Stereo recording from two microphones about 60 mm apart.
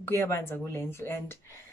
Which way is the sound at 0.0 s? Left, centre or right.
Left.